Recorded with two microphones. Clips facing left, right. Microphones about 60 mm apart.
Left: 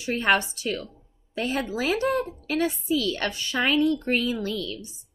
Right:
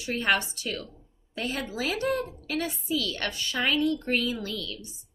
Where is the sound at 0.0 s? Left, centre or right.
Left.